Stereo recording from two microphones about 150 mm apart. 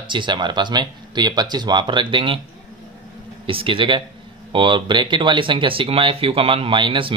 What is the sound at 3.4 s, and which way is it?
Speech, 35° right (ahead or behind).